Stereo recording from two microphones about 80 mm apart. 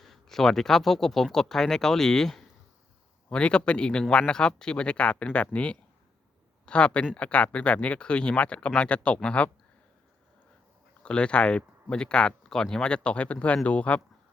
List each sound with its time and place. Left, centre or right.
0.0 s speech: centre
11.0 s speech: centre